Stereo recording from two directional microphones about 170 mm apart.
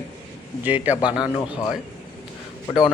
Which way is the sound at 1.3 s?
20° left (ahead or behind).